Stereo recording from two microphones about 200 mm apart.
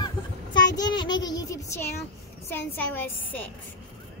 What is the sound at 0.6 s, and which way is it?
Child singing, 20° left (ahead or behind).